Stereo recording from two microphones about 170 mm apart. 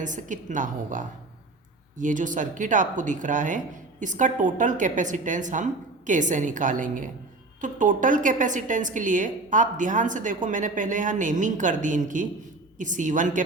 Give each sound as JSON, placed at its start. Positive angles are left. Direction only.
{"t": 0.0, "sound": "a woman's voice", "side_deg": -50}